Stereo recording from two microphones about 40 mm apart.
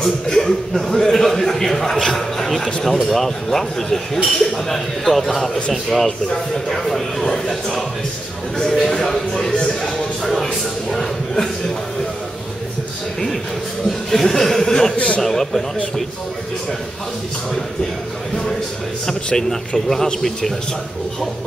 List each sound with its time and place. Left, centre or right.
0.0 s a man's voice: centre
14.1 s a man's voice: centre
15.0 s a man's voice: left
15.2 s a man's voice: centre